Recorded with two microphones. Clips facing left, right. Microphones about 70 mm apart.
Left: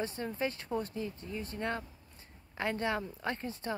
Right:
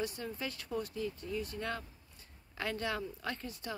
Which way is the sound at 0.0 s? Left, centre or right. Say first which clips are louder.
Left 4 dB; left.